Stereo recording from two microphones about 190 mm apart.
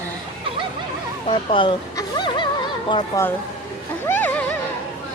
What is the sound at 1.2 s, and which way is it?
Speech, 25° left (ahead or behind).